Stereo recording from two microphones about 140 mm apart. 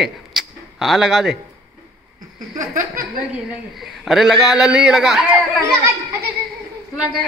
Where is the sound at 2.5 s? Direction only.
75° right (ahead or behind).